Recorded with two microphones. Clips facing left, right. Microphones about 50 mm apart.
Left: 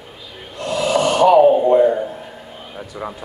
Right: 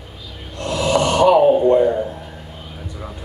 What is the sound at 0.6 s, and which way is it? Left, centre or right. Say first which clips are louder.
Snort: even; centre.